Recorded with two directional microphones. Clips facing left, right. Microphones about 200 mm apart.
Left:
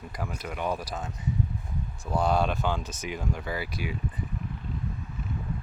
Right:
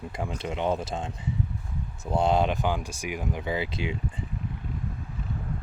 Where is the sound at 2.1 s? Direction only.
25° right (ahead or behind).